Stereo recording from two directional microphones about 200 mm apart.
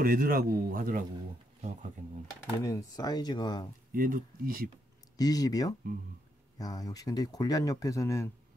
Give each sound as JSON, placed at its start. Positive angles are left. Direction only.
{"t": 0.0, "sound": "a man's voice", "side_deg": -45}
{"t": 2.6, "sound": "speech", "side_deg": 15}
{"t": 3.9, "sound": "a man's voice", "side_deg": -45}
{"t": 5.1, "sound": "speech", "side_deg": 20}